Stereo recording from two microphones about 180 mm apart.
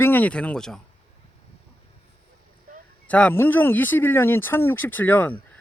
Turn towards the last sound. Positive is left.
turn(degrees=10)  # may be behind; listen again after turning